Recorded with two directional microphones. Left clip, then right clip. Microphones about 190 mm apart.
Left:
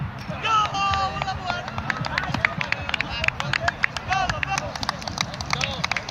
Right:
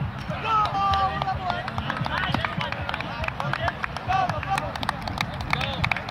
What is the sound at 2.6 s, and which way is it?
Run, 45° right (ahead or behind).